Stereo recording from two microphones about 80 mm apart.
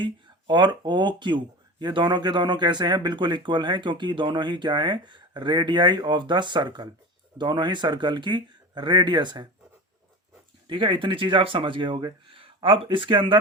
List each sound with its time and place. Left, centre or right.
0.0 s speech: right
10.7 s speech: right